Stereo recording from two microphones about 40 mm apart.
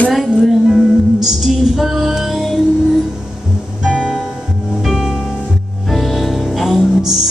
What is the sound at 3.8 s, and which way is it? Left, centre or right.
Music, centre.